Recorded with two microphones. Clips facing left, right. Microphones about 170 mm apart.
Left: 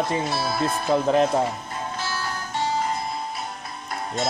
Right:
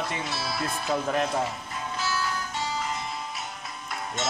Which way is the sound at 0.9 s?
30° left (ahead or behind).